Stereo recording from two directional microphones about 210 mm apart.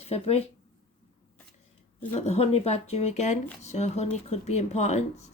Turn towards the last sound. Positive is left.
turn(degrees=30)  # may be behind; listen again after turning